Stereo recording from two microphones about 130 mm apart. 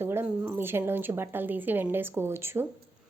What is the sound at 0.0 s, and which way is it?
A woman's voice, 15° right (ahead or behind).